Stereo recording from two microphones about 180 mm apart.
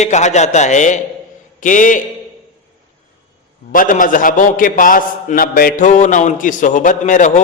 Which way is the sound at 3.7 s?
50° left (ahead or behind).